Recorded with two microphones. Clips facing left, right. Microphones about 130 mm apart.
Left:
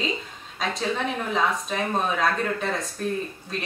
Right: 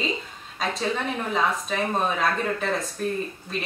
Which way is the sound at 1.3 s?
Centre (ahead or behind).